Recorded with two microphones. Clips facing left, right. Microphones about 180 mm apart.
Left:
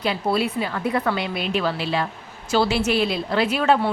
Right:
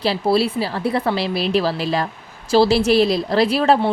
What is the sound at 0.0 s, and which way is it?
A woman's voice, 30° right (ahead or behind).